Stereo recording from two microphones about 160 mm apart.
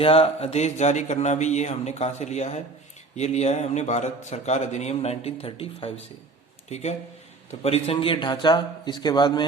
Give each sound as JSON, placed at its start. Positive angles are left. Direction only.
{"t": 0.0, "sound": "a man's voice", "side_deg": 40}